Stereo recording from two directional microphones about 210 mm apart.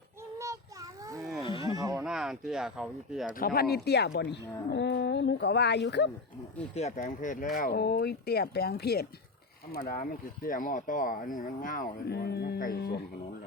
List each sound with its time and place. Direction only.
0.3 s child singing: 15° right (ahead or behind)
1.7 s a sound: 15° right (ahead or behind)
2.0 s speech: centre (ahead or behind)
3.3 s speech: 45° left (ahead or behind)
6.7 s speech: 35° left (ahead or behind); by 9.0 s 50° left (ahead or behind)
9.8 s speech: 40° left (ahead or behind)